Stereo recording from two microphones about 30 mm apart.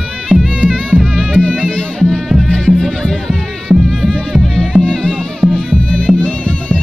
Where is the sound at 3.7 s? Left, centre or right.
Right.